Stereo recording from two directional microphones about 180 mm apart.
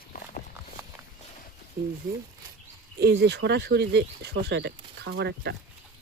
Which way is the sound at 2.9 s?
65° right (ahead or behind).